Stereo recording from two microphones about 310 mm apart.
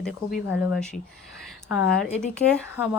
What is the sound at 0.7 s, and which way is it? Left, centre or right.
A woman's voice, centre.